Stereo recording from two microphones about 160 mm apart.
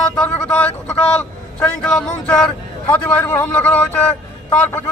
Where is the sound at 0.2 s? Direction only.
5° left (ahead or behind).